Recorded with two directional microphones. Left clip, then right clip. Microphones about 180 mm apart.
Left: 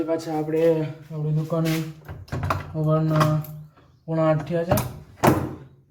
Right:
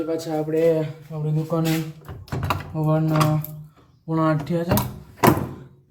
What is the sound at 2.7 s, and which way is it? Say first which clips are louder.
Speech: right 1 dB; 35° right (ahead or behind).